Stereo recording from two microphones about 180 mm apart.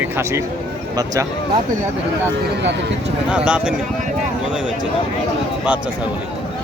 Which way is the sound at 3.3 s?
5° right (ahead or behind).